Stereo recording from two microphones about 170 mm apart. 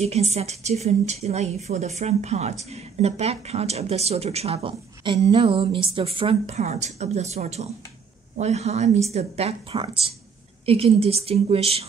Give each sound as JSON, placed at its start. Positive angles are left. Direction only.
{"t": 0.0, "sound": "a woman's voice", "side_deg": -40}